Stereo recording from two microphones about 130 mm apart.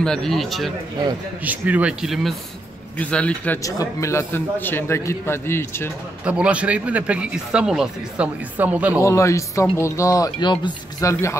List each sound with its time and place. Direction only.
0.0 s a man's voice: 5° left (ahead or behind)
1.4 s speech: 10° right (ahead or behind)
3.0 s a man's voice: 10° left (ahead or behind)
3.6 s a man's voice: 25° left (ahead or behind)
6.2 s speech: 10° right (ahead or behind)
9.0 s speech: 20° left (ahead or behind)
11.1 s speech: 20° left (ahead or behind)